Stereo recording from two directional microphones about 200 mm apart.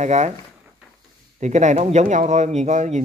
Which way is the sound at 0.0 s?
35° right (ahead or behind).